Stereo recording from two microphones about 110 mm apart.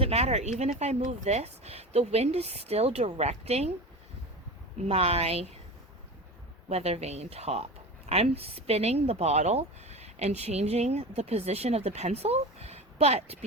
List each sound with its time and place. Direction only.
0.0 s speech: 70° right (ahead or behind)
4.9 s speech: 65° right (ahead or behind)
6.7 s speech: 75° right (ahead or behind)